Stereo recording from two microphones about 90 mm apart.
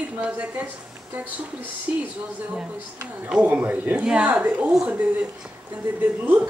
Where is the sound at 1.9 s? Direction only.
15° right (ahead or behind).